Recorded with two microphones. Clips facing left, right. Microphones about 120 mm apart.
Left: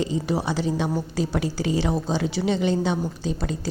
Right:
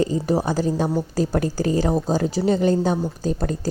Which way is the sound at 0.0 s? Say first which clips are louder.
Right 4 dB; 40° right (ahead or behind).